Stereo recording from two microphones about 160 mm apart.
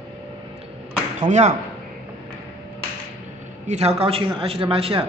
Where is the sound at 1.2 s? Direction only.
45° right (ahead or behind).